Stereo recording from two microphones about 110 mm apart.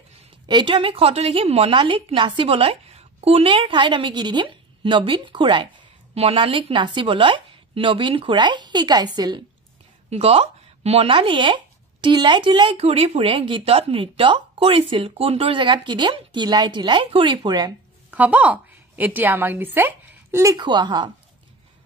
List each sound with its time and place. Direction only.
0.5 s a woman's voice: 45° right (ahead or behind); by 1.7 s 65° right (ahead or behind)
1.7 s speech: 50° right (ahead or behind)
6.1 s speech: 60° right (ahead or behind); by 9.4 s 40° right (ahead or behind)
10.0 s speech: 65° right (ahead or behind); by 12.7 s 50° right (ahead or behind)
12.7 s speech: 70° right (ahead or behind)
13.3 s speech: 50° right (ahead or behind)
18.1 s a woman's voice: 15° right (ahead or behind)
20.5 s speech: 45° right (ahead or behind)